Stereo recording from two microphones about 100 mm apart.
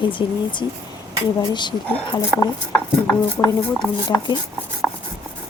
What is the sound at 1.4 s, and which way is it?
Speech, 50° left (ahead or behind).